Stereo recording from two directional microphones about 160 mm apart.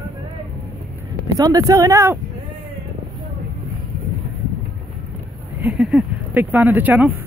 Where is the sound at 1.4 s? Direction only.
20° right (ahead or behind).